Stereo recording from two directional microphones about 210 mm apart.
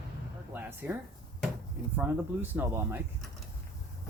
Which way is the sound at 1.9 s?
10° right (ahead or behind).